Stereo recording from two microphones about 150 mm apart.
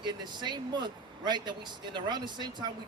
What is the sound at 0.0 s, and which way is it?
Speech, 30° right (ahead or behind).